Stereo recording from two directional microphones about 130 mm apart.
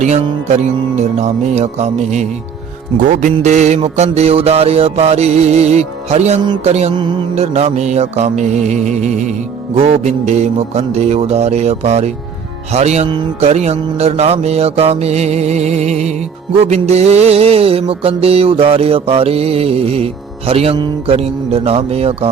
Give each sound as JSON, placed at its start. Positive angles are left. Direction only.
{"t": 0.0, "sound": "mantra", "side_deg": -60}
{"t": 3.1, "sound": "music", "side_deg": -90}
{"t": 3.4, "sound": "mantra", "side_deg": -65}
{"t": 9.7, "sound": "mantra", "side_deg": -55}
{"t": 16.6, "sound": "music", "side_deg": -55}